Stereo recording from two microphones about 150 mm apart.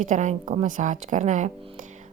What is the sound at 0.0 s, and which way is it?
A woman's voice, 55° right (ahead or behind).